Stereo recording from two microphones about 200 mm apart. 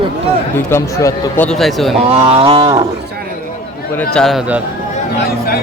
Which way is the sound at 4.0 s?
5° left (ahead or behind).